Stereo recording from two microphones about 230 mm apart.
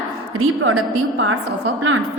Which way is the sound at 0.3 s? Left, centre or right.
Right.